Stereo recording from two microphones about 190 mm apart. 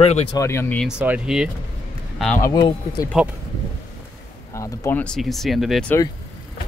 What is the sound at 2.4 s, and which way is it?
Speech, 20° left (ahead or behind).